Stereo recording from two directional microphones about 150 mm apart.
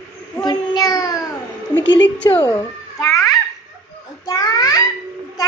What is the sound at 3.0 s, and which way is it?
Babbling, 20° left (ahead or behind).